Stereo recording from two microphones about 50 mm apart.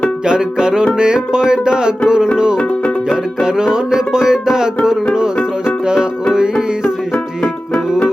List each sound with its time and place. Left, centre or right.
0.3 s music: centre